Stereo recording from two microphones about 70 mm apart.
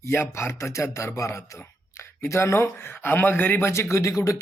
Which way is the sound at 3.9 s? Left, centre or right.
Left.